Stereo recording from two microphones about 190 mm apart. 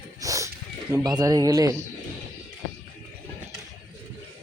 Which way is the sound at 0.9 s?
20° right (ahead or behind).